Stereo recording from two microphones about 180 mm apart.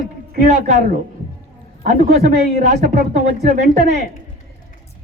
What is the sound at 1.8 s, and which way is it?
Speech, 60° right (ahead or behind).